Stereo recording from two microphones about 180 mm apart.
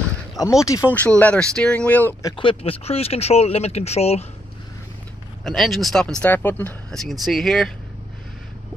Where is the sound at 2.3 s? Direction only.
30° left (ahead or behind).